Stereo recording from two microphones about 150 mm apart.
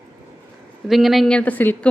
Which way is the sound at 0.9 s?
Centre (ahead or behind).